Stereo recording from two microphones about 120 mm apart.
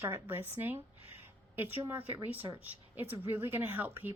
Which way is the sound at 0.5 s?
15° right (ahead or behind).